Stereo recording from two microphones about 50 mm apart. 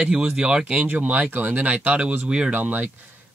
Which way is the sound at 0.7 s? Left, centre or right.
Right.